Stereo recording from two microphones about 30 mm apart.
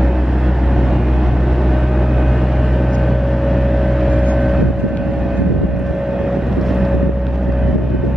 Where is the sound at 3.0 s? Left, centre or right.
Centre.